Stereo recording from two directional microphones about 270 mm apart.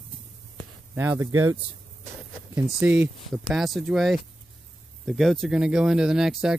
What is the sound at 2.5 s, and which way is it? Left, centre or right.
Speech, centre.